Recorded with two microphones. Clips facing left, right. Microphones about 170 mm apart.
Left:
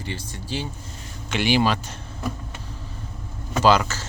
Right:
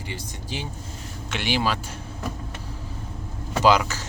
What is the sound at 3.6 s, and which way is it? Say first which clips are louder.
Speech: left 1 dB; 15° right (ahead or behind).